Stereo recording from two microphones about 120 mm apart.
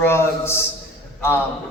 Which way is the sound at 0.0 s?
20° left (ahead or behind).